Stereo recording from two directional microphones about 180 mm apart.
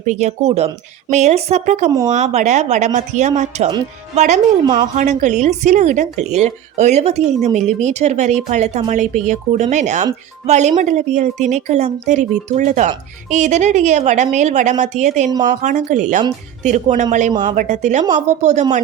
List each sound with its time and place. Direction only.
0.0 s speech: 40° right (ahead or behind)
4.6 s a woman's voice: 25° right (ahead or behind)
4.9 s speech: 40° right (ahead or behind)